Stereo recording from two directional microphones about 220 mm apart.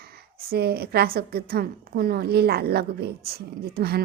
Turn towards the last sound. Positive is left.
turn(degrees=-45)  # may be behind; listen again after turning